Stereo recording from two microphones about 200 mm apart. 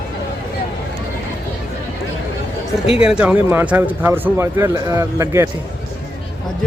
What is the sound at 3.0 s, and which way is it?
Speech, 5° right (ahead or behind).